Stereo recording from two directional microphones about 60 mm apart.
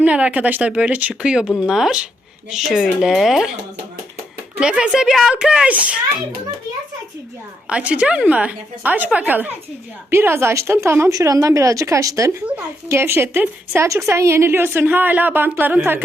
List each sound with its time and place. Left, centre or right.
0.0 s speech: right; by 3.6 s centre
4.6 s a woman's voice: centre
7.7 s speech: right
10.1 s a woman's voice: right
11.1 s speech: right
12.5 s a woman's voice: right
13.8 s a woman's voice: right